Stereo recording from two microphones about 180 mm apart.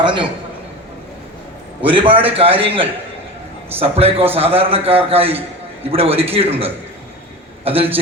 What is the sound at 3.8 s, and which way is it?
A man's voice, 35° right (ahead or behind).